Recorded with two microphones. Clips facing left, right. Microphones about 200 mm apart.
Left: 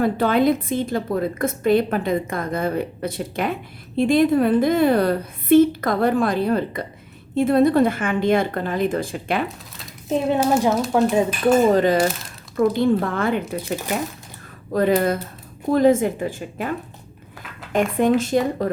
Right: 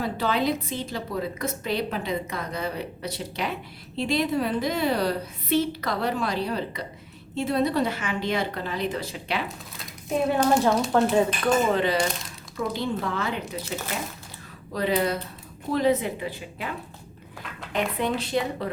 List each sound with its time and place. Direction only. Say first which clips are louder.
0.0 s a woman's voice: left 8 dB; 55° left (ahead or behind)
10.4 s speech: left 2 dB; 5° left (ahead or behind)
11.7 s a woman's voice: left 7 dB; 45° left (ahead or behind)
11.9 s speech: left 6 dB; 5° left (ahead or behind)
12.5 s a woman's voice: left 10 dB; 55° left (ahead or behind)
14.7 s a woman's voice: left 6 dB; 50° left (ahead or behind)